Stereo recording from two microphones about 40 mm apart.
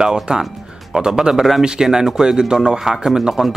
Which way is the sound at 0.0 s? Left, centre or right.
Centre.